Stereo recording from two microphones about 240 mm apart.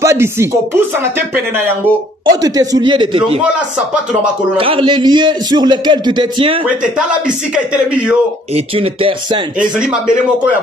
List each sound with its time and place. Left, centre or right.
0.0 s a man's voice: centre
3.5 s speech: centre
4.6 s a man's voice: right
6.8 s speech: centre
8.5 s a man's voice: right
9.6 s speech: centre